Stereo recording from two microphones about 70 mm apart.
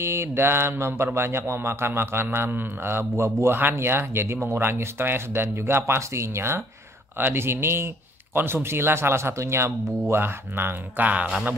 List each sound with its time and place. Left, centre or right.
0.0 s speech: right